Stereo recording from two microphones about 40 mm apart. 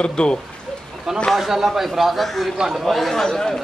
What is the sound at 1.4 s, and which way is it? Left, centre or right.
A man's voice, centre.